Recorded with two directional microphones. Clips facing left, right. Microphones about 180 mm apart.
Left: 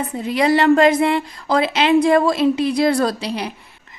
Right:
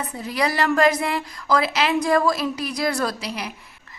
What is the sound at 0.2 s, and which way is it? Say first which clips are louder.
A woman's voice: left 7 dB; 25° left (ahead or behind).